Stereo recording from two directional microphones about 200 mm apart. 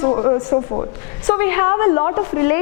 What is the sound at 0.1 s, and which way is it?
A woman's voice, 20° left (ahead or behind).